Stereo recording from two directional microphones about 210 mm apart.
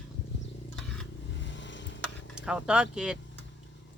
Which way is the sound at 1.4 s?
60° left (ahead or behind).